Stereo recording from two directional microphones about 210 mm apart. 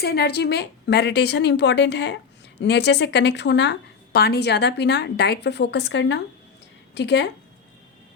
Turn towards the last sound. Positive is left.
turn(degrees=55)  # may be behind; listen again after turning